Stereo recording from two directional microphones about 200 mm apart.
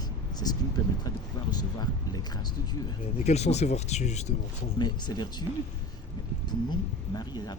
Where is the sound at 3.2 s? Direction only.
35° left (ahead or behind).